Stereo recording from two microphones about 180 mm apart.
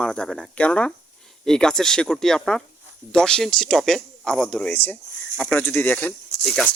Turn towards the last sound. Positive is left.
turn(degrees=5)  # may be behind; listen again after turning